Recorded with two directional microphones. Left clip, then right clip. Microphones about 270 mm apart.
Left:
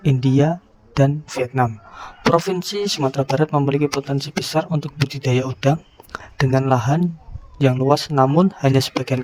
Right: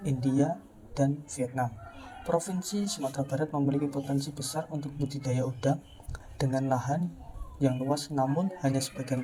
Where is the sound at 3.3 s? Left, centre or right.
Left.